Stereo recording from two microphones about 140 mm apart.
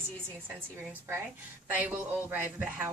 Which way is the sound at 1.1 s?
15° right (ahead or behind).